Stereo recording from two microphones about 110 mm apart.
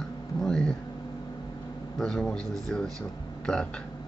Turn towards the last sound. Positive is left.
turn(degrees=5)  # may be behind; listen again after turning